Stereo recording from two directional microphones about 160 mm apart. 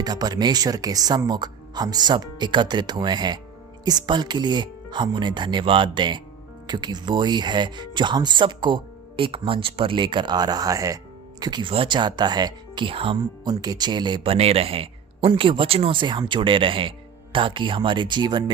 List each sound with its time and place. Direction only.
0.0 s speech: 25° right (ahead or behind)